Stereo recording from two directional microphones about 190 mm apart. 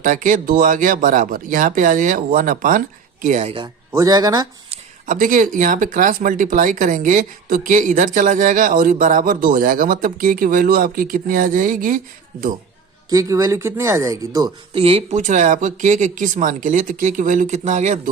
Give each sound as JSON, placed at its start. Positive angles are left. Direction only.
{"t": 0.0, "sound": "speech", "side_deg": -40}
{"t": 3.9, "sound": "speech", "side_deg": -20}
{"t": 4.7, "sound": "speech", "side_deg": -45}
{"t": 13.1, "sound": "speech", "side_deg": -15}
{"t": 14.7, "sound": "speech", "side_deg": -30}